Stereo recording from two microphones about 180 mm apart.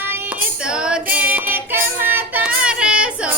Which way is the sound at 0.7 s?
5° right (ahead or behind).